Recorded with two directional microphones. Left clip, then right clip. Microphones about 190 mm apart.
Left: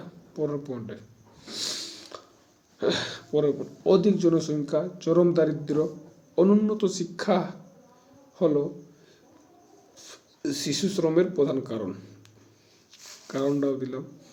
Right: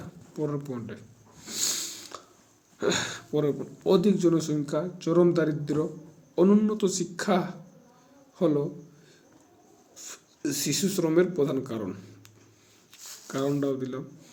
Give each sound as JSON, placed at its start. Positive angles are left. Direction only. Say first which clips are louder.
{"t": 0.3, "sound": "a sound", "louder": "left 2 dB", "side_deg": -10}
{"t": 2.7, "sound": "speech", "louder": "left 1 dB", "side_deg": -10}
{"t": 9.9, "sound": "speech", "louder": "right 3 dB", "side_deg": -10}